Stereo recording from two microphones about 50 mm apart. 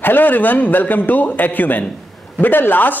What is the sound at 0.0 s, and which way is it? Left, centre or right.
A man's voice, left.